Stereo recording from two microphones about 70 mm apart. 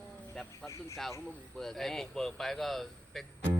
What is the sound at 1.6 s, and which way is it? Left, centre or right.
Speech, centre.